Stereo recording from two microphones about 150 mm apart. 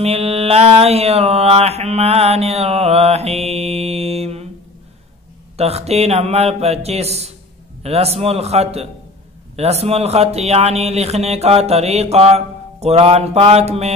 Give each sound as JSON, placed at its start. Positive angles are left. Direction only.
{"t": 0.0, "sound": "mantra", "side_deg": -40}
{"t": 5.6, "sound": "mantra", "side_deg": -45}